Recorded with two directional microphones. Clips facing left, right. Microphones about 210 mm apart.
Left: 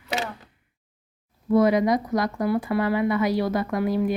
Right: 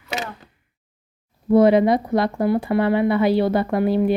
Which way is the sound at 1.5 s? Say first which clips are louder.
Right 5 dB; 30° right (ahead or behind).